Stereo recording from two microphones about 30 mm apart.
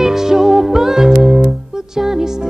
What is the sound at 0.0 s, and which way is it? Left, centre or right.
Music, centre.